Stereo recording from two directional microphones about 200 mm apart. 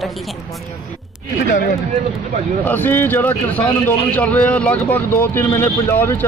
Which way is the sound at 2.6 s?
10° left (ahead or behind).